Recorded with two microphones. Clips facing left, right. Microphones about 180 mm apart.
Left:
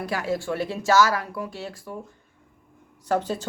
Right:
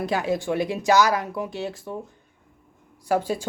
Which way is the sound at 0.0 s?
20° right (ahead or behind).